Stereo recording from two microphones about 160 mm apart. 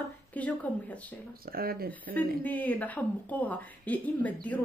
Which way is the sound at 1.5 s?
70° right (ahead or behind).